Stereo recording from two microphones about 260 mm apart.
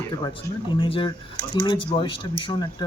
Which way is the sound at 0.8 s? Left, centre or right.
Centre.